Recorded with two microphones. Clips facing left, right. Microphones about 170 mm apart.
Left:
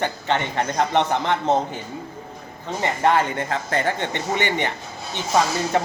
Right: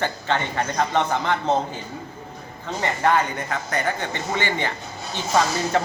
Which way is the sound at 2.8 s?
25° left (ahead or behind).